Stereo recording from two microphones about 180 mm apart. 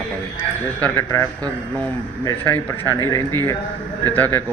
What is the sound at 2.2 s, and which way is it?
Speech, 15° left (ahead or behind).